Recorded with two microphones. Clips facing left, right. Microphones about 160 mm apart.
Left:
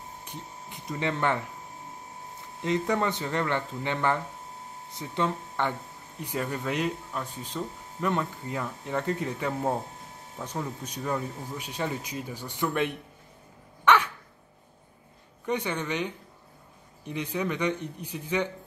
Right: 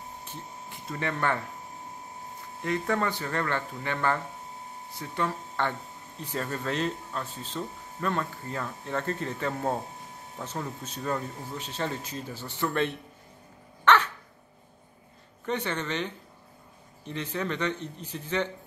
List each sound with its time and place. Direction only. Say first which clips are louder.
0.2 s speech: even; 15° left (ahead or behind)
2.6 s speech: left 2 dB; 20° left (ahead or behind)
13.8 s dog: even; 10° left (ahead or behind)
15.4 s speech: left 1 dB; 10° left (ahead or behind)